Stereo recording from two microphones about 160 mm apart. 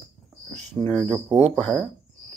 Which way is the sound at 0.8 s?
10° left (ahead or behind).